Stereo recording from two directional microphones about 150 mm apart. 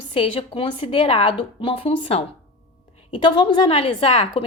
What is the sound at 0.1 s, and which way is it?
A woman's voice, 35° left (ahead or behind).